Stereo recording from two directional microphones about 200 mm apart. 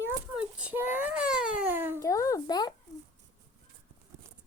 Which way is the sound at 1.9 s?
15° left (ahead or behind).